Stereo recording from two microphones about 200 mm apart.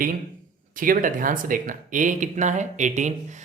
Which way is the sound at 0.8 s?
45° right (ahead or behind).